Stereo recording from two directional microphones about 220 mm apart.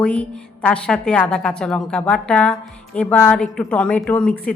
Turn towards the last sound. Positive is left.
turn(degrees=5)  # may be behind; listen again after turning